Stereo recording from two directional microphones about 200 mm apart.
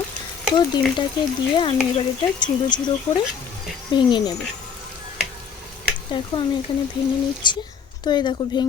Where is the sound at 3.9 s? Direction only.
25° left (ahead or behind).